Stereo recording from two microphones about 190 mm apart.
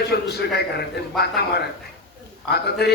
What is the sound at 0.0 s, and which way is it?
A man's voice, 60° left (ahead or behind).